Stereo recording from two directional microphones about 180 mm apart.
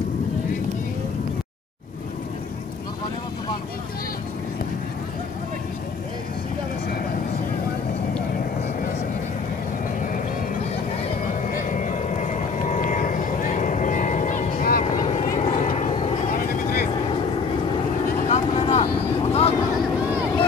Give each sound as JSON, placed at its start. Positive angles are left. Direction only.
{"t": 11.5, "sound": "vehicle", "side_deg": 45}
{"t": 16.3, "sound": "vehicle", "side_deg": 50}
{"t": 18.3, "sound": "vehicle", "side_deg": 35}